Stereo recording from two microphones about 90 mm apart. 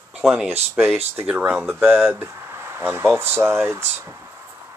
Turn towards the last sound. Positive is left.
turn(degrees=-30)  # may be behind; listen again after turning